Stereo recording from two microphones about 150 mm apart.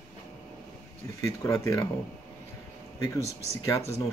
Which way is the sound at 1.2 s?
20° left (ahead or behind).